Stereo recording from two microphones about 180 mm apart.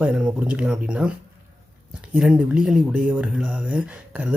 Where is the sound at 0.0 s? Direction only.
5° right (ahead or behind).